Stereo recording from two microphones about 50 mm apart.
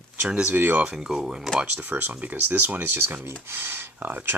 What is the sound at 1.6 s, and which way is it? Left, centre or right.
Speech, right.